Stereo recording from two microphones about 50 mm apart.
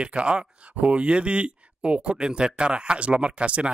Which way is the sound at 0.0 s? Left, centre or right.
Right.